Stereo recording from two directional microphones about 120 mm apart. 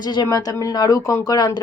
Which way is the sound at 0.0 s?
35° left (ahead or behind).